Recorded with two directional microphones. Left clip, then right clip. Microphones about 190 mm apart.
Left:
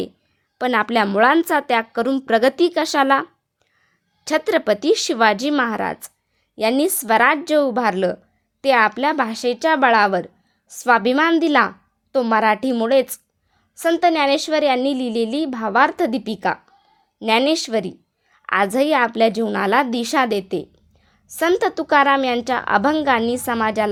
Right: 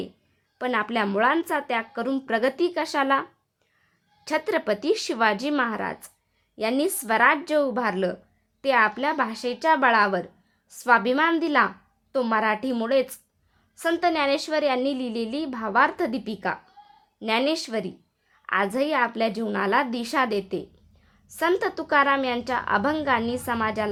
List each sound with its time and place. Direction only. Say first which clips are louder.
0.6 s a woman's voice: left 7 dB; 40° left (ahead or behind)